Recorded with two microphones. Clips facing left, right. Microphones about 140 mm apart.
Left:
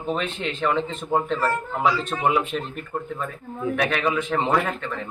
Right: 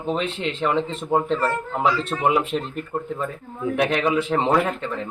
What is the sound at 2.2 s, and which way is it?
Speech, 30° right (ahead or behind).